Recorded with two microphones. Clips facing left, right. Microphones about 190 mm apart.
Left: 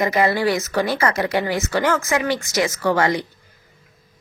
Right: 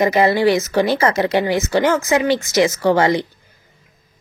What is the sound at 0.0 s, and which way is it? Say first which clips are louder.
Speech: right 4 dB; 20° right (ahead or behind).